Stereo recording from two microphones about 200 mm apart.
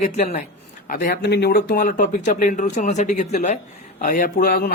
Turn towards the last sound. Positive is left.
turn(degrees=50)  # may be behind; listen again after turning